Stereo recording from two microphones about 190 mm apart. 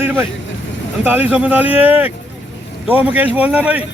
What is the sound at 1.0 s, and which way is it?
Speech, 10° right (ahead or behind).